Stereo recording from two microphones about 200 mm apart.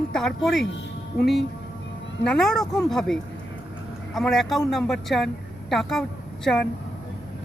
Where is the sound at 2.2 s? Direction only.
5° left (ahead or behind).